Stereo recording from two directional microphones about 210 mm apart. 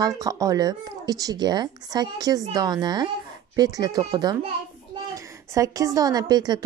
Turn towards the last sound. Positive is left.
turn(degrees=-20)  # may be behind; listen again after turning